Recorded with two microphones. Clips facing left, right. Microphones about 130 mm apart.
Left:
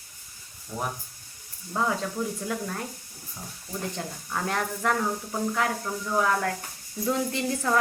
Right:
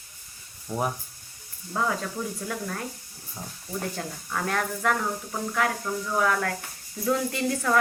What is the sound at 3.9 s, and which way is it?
Speech, 20° left (ahead or behind).